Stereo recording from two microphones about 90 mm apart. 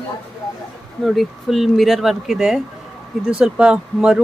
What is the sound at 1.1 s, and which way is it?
Speech, centre (ahead or behind).